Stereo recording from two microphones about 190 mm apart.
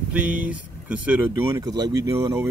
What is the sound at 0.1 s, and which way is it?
Speech, 5° right (ahead or behind).